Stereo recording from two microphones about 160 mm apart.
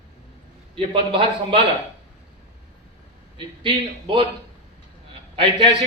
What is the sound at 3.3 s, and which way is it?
Speech, 30° right (ahead or behind).